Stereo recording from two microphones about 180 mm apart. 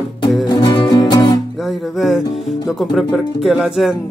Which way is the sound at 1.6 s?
Centre (ahead or behind).